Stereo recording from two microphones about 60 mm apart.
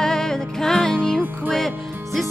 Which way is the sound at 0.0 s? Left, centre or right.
Centre.